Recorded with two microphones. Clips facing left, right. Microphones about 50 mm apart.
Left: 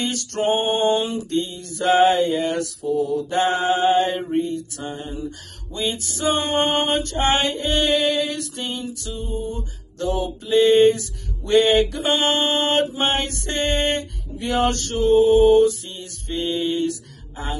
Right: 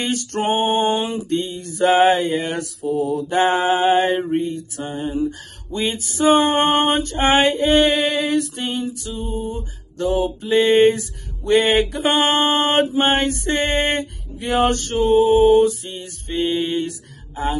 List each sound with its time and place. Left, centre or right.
0.0 s mantra: right
4.4 s a sound: right
5.0 s mantra: right